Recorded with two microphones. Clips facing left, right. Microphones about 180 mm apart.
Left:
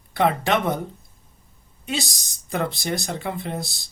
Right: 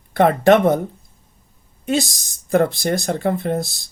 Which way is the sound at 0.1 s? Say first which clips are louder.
Right 8 dB; 50° right (ahead or behind).